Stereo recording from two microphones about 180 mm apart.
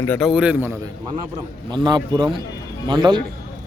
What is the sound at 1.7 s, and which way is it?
A man's voice, 25° right (ahead or behind).